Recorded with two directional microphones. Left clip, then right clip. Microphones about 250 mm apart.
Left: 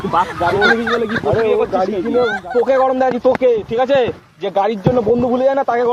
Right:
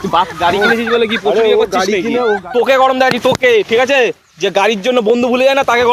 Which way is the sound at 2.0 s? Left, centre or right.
Centre.